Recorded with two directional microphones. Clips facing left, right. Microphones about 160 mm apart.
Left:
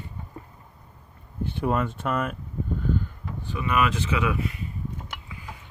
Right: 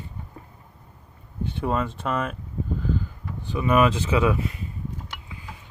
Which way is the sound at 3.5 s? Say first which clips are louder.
Right 5 dB; 35° right (ahead or behind).